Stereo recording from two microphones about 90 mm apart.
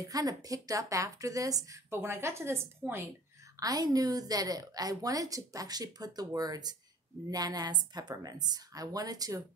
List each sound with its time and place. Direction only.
0.0 s speech: 45° right (ahead or behind); by 3.0 s 25° right (ahead or behind)
3.5 s a woman's voice: 45° right (ahead or behind)